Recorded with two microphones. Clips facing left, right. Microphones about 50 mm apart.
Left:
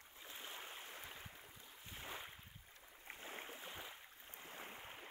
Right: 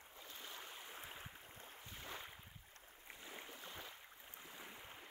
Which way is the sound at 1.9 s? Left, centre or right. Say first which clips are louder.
Left 1 dB; centre.